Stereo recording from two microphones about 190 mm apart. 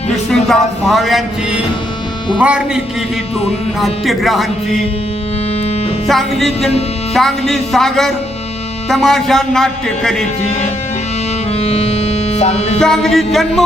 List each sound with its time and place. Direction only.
0.3 s speech: centre (ahead or behind)
6.1 s speech: centre (ahead or behind)
11.6 s music: 35° left (ahead or behind)
12.8 s speech: centre (ahead or behind)